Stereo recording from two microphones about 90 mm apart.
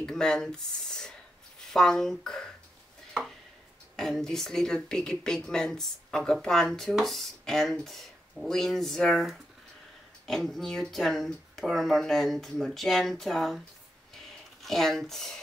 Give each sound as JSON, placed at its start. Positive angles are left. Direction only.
{"t": 0.0, "sound": "speech", "side_deg": 5}
{"t": 3.9, "sound": "speech", "side_deg": 5}
{"t": 14.1, "sound": "a sound", "side_deg": 0}